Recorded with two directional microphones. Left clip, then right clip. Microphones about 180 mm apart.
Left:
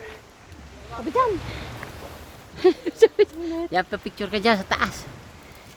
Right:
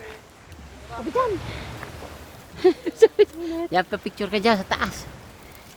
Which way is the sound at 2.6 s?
5° left (ahead or behind).